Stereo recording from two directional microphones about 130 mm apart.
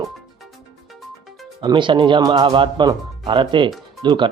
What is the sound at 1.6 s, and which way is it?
Speech, 35° right (ahead or behind).